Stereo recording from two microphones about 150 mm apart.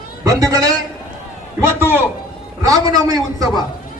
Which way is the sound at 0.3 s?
25° right (ahead or behind).